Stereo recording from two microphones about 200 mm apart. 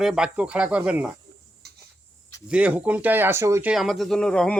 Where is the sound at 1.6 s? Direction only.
55° right (ahead or behind).